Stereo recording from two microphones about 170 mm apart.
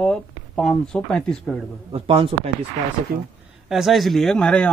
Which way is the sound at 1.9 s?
35° right (ahead or behind).